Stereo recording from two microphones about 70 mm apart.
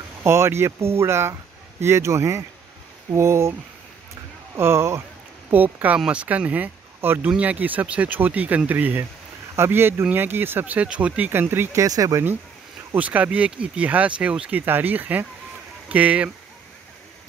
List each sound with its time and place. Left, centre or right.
0.2 s speech: right
4.6 s speech: right
5.5 s speech: right
11.7 s speech: right
12.9 s speech: right
14.5 s speech: right